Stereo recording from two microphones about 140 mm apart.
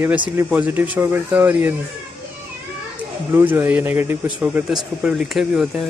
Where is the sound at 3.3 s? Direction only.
15° right (ahead or behind).